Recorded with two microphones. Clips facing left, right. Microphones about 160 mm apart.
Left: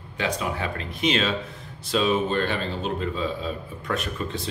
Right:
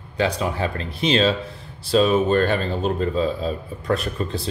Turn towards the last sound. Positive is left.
turn(degrees=-35)  # may be behind; listen again after turning